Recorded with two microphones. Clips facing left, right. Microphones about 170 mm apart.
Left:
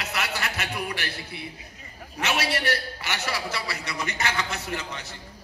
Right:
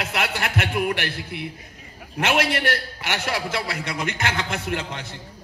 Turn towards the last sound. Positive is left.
turn(degrees=-55)  # may be behind; listen again after turning